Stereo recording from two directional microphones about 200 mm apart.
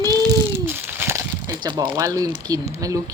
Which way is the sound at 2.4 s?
15° right (ahead or behind).